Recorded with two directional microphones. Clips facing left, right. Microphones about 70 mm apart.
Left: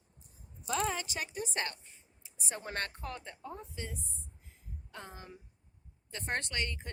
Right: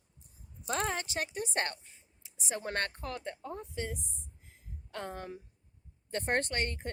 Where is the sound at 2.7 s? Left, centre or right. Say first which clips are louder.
Right 1 dB; right.